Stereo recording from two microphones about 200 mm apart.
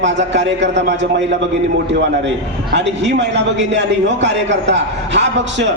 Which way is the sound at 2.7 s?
60° right (ahead or behind).